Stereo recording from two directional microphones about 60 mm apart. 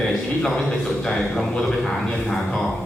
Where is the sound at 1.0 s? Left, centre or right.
Centre.